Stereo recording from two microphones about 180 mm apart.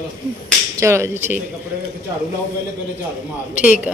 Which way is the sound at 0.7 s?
15° right (ahead or behind).